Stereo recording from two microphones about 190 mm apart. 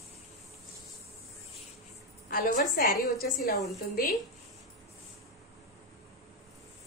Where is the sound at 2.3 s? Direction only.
50° left (ahead or behind).